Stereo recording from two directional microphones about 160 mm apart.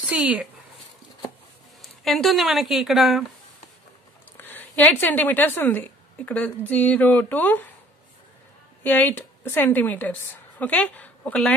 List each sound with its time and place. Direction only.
0.0 s speech: 10° right (ahead or behind)
1.8 s speech: centre (ahead or behind)
4.4 s a woman's voice: 10° left (ahead or behind)
8.8 s a woman's voice: 10° left (ahead or behind)